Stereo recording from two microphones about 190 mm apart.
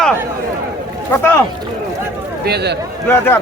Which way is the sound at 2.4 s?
60° right (ahead or behind).